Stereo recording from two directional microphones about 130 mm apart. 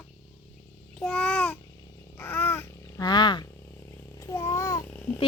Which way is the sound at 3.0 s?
35° left (ahead or behind).